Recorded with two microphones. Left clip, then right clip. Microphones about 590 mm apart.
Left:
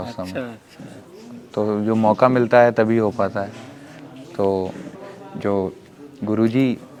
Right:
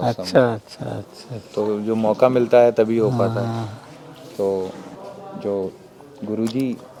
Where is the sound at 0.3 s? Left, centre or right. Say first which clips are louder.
Right 13 dB; right.